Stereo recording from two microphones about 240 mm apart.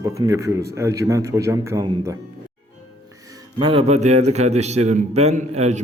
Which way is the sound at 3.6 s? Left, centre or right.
Right.